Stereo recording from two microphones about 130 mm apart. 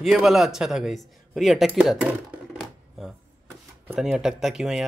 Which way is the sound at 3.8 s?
5° right (ahead or behind).